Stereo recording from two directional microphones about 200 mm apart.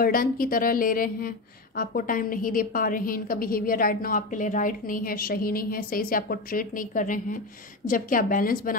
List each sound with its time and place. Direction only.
0.0 s a woman's voice: 45° left (ahead or behind)